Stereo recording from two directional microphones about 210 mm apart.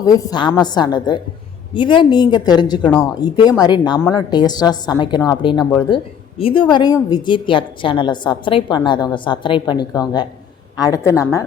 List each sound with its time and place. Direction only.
0.0 s a woman's voice: 15° left (ahead or behind)